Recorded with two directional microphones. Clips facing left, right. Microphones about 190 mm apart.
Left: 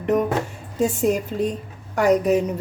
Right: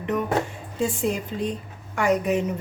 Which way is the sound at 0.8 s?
45° left (ahead or behind).